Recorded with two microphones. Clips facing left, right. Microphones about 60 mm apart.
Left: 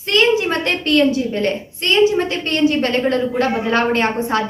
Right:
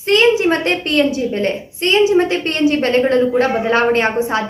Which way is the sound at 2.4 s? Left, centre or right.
Right.